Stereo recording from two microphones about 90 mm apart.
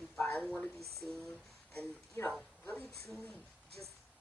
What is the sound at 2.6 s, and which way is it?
Speech, 15° left (ahead or behind).